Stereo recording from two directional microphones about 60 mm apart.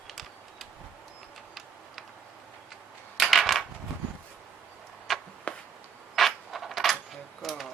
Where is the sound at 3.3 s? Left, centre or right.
Centre.